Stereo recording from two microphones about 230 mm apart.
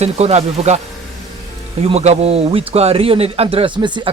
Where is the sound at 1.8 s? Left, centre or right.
Right.